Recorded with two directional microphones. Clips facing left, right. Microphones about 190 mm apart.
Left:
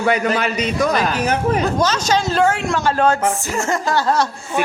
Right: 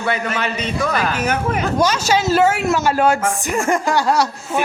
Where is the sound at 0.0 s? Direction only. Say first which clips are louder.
Left 4 dB; 40° left (ahead or behind).